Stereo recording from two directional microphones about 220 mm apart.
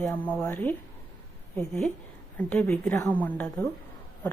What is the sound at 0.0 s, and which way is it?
A woman's voice, 5° left (ahead or behind).